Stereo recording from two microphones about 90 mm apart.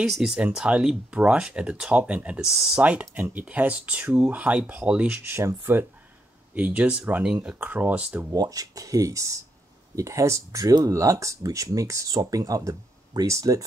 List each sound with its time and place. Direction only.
0.1 s speech: 5° right (ahead or behind)
8.3 s speech: 40° right (ahead or behind)